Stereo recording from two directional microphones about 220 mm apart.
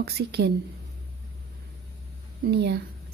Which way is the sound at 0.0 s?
45° right (ahead or behind).